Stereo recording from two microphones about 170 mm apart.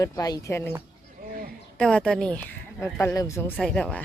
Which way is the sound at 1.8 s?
5° left (ahead or behind).